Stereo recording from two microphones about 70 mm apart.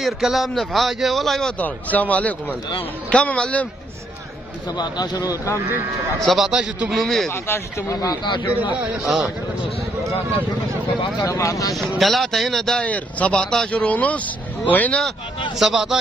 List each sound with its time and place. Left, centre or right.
0.0 s speech: centre
1.6 s speech: left
4.7 s speech: left
6.1 s speech: centre
6.5 s a man's voice: centre
6.9 s speech: centre
7.4 s speech: left
8.0 s speech: left
8.7 s a man's voice: centre
11.1 s speech: left
11.7 s speech: centre
12.8 s speech: centre
15.6 s speech: centre